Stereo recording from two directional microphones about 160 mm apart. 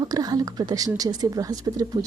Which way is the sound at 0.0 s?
25° right (ahead or behind).